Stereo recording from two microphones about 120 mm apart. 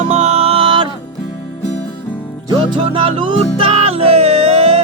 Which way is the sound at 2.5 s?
45° right (ahead or behind).